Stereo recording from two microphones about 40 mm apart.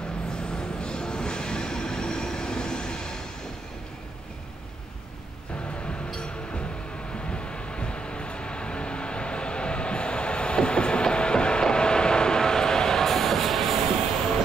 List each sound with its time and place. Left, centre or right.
0.6 s train: left
7.2 s vehicle: left; by 13.8 s centre